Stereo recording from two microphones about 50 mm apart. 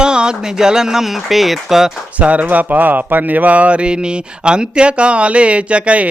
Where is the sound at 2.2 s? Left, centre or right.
Right.